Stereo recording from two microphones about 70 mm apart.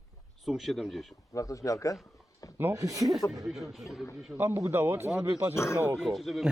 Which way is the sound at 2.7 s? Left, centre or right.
Right.